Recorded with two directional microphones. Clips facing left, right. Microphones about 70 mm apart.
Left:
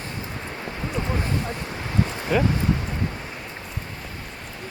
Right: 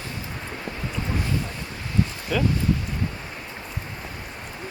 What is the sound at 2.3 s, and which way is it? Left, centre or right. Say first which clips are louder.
Speech: left 3 dB; left.